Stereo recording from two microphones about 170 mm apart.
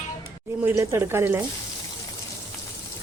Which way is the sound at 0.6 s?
15° right (ahead or behind).